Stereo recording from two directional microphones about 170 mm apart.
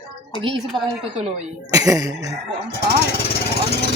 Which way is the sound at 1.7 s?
20° right (ahead or behind).